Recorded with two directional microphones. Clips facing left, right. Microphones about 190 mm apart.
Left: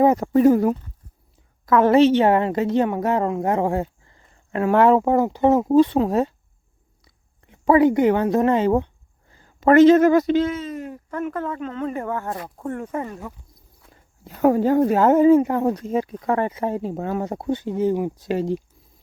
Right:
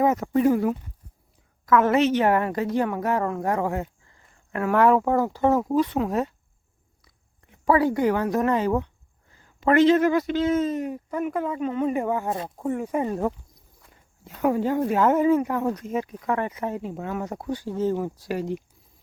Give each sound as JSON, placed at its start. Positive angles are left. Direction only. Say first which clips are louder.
{"t": 0.0, "sound": "a woman's voice", "louder": "left 5 dB", "side_deg": 35}
{"t": 7.5, "sound": "a woman's voice", "louder": "left 5 dB", "side_deg": 25}
{"t": 9.3, "sound": "speech", "louder": "left 6 dB", "side_deg": 40}
{"t": 10.7, "sound": "speech", "louder": "right 3 dB", "side_deg": -20}
{"t": 14.4, "sound": "speech", "louder": "left 6 dB", "side_deg": 40}
{"t": 18.3, "sound": "a woman's voice", "louder": "left 6 dB", "side_deg": 30}